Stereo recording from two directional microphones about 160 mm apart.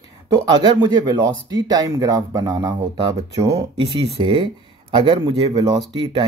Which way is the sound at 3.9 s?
35° right (ahead or behind).